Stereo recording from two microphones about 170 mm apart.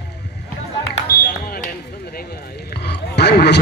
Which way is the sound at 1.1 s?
60° left (ahead or behind).